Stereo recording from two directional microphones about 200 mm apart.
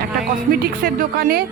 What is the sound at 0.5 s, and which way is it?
Speech, 45° right (ahead or behind).